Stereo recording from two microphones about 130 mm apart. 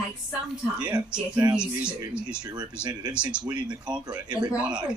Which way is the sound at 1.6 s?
10° right (ahead or behind).